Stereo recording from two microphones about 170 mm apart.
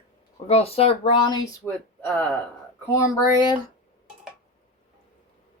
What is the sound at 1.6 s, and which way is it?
Speech, 5° left (ahead or behind).